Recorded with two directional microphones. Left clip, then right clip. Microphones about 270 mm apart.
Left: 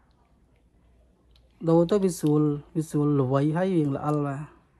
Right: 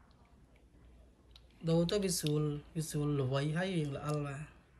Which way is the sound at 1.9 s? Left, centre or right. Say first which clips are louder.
Left 11 dB; centre.